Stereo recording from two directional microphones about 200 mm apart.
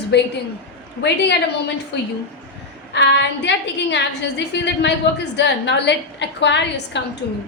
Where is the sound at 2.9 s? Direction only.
60° left (ahead or behind).